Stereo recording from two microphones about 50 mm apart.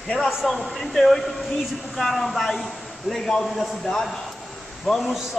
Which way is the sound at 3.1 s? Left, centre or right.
Centre.